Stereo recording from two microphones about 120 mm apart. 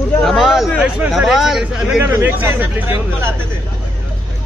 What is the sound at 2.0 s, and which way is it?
Speech, 20° right (ahead or behind).